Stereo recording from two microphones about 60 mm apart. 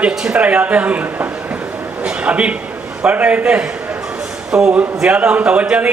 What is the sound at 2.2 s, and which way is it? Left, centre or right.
A man's voice, right.